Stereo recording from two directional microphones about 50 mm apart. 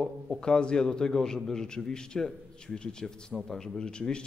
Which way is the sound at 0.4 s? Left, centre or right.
Centre.